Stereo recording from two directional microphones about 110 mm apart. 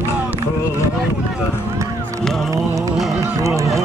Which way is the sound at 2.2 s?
Centre (ahead or behind).